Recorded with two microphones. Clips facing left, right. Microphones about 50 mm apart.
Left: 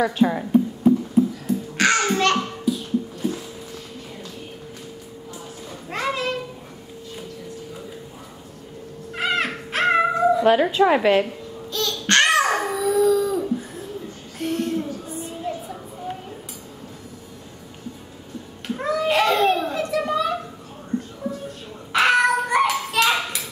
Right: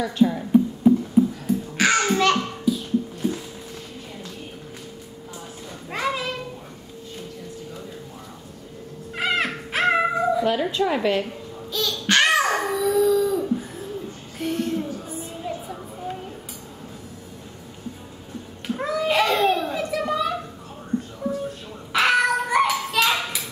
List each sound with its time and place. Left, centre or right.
0.2 s a sound: left
1.5 s babbling: centre
5.9 s a sound: centre
9.1 s dog: centre
10.4 s a woman's voice: centre
11.2 s babbling: centre
14.4 s child singing: centre
18.8 s children playing: centre
21.2 s music: centre
21.9 s a sound: centre